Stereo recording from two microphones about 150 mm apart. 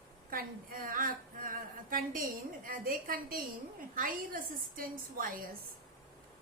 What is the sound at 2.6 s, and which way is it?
A woman's voice, 70° right (ahead or behind).